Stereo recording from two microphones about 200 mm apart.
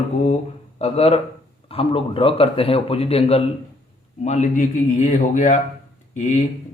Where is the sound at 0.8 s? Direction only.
30° left (ahead or behind).